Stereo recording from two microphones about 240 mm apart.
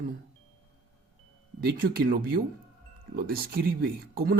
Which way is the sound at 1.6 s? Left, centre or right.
Right.